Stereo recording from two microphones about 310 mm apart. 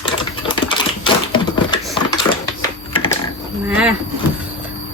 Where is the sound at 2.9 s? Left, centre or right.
Centre.